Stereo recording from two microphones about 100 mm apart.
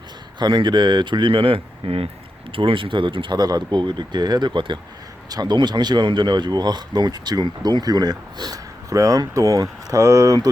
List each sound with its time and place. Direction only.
0.3 s speech: 50° right (ahead or behind)